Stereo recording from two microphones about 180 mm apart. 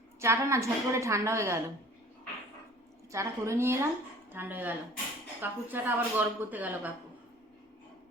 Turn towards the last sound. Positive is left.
turn(degrees=-10)  # may be behind; listen again after turning